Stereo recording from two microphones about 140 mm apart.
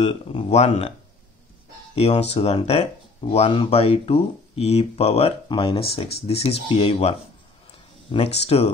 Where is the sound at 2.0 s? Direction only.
50° left (ahead or behind).